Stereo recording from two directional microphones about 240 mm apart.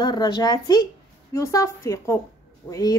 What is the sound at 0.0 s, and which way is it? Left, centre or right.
A woman's voice, centre.